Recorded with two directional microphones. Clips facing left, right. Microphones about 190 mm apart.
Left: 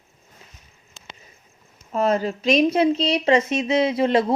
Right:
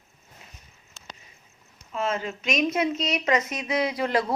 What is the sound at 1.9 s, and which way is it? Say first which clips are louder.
A woman's voice: left 7 dB; 40° left (ahead or behind).